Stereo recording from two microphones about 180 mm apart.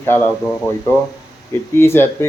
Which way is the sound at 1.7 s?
15° left (ahead or behind).